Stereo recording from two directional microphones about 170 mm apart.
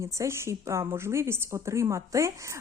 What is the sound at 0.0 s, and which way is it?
A woman's voice, 15° right (ahead or behind).